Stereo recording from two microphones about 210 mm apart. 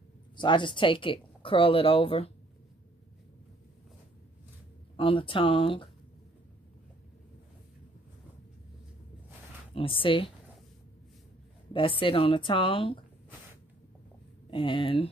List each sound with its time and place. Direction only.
0.4 s speech: 20° left (ahead or behind)
4.9 s speech: 25° left (ahead or behind)
9.8 s speech: 25° left (ahead or behind)
11.7 s speech: 25° left (ahead or behind)
14.5 s speech: 25° left (ahead or behind)